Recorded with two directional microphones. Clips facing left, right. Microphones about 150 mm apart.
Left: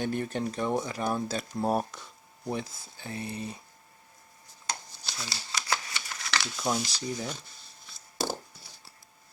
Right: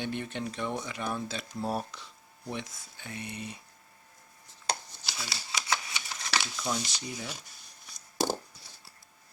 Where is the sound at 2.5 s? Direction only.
35° left (ahead or behind).